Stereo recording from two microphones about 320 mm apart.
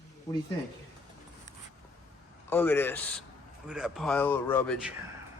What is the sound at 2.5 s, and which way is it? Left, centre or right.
Speech, centre.